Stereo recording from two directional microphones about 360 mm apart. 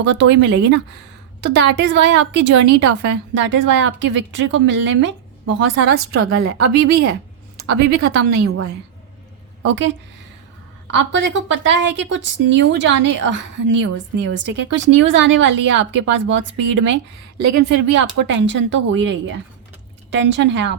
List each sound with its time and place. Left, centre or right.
0.0 s speech: right
6.1 s a woman's voice: right
6.8 s speech: right
10.9 s speech: right